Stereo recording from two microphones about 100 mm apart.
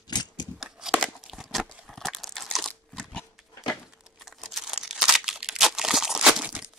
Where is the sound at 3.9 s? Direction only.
5° right (ahead or behind).